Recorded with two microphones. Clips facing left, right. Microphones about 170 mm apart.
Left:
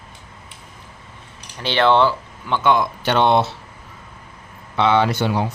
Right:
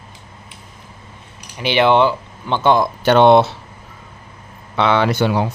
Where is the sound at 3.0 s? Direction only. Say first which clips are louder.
Right 7 dB; 55° right (ahead or behind).